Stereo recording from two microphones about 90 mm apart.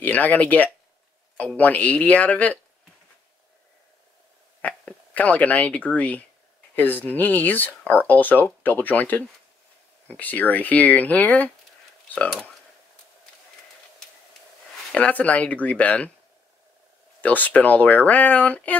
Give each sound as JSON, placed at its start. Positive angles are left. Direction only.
{"t": 0.0, "sound": "speech", "side_deg": 15}
{"t": 4.6, "sound": "speech", "side_deg": 15}
{"t": 14.9, "sound": "speech", "side_deg": 15}
{"t": 17.2, "sound": "speech", "side_deg": 20}